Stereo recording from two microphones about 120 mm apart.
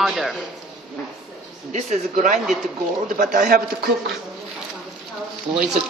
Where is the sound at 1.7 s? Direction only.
80° right.